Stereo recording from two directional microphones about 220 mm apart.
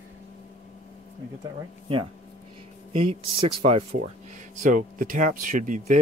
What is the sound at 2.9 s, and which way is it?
Speech, 25° right (ahead or behind).